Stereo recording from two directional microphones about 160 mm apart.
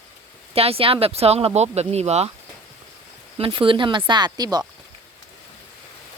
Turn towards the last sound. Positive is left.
turn(degrees=-25)  # may be behind; listen again after turning